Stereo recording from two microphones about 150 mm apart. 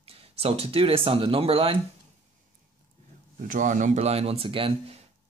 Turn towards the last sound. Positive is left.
turn(degrees=-40)  # may be behind; listen again after turning